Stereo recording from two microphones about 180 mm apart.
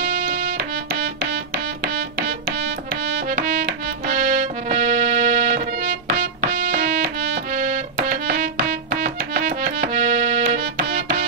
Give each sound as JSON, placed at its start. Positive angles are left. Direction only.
{"t": 0.0, "sound": "music", "side_deg": -60}